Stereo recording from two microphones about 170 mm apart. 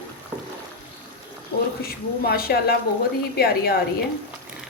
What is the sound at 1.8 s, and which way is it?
A woman's voice, 60° left (ahead or behind).